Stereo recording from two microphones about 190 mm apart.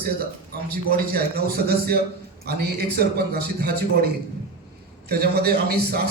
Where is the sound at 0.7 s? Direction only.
50° right (ahead or behind).